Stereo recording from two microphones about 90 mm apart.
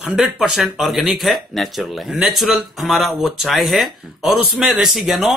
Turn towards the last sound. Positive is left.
turn(degrees=0)  # may be behind; listen again after turning